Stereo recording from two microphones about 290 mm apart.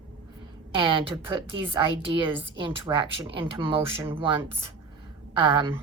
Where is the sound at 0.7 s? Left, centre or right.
Centre.